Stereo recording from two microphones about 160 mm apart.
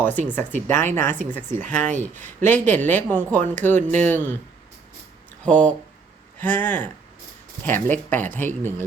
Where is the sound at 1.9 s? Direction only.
50° right (ahead or behind).